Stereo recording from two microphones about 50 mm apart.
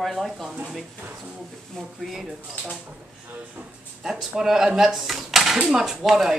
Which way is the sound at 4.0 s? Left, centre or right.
Centre.